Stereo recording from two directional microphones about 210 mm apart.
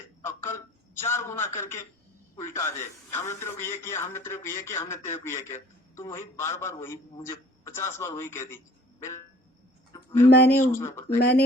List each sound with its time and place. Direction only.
0.9 s speech: 10° left (ahead or behind)
9.9 s a sound: 15° left (ahead or behind)
10.2 s speech: 50° left (ahead or behind)
10.8 s speech: 15° left (ahead or behind)
11.2 s speech: 50° left (ahead or behind)